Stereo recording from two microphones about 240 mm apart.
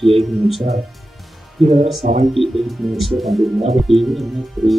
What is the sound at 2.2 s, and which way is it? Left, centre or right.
Speech, centre.